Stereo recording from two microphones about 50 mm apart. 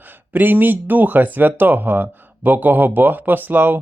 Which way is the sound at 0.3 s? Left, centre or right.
Right.